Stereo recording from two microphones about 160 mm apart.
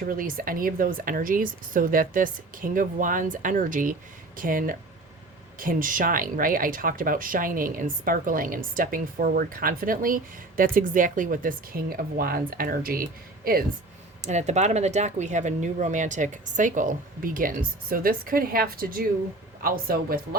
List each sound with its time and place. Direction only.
0.0 s speech: 60° right (ahead or behind)
14.2 s speech: 45° right (ahead or behind); by 20.2 s 65° right (ahead or behind)